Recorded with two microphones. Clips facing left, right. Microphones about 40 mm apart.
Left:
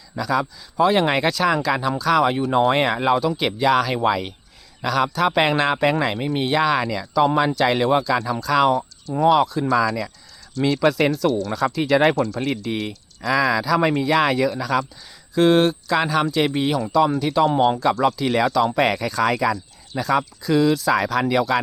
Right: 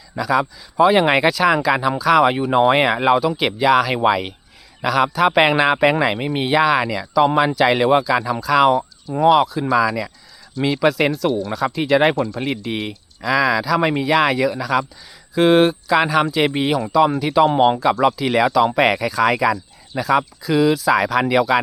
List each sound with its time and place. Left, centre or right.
0.2 s speech: centre
13.2 s speech: centre
17.4 s speech: right
18.2 s speech: centre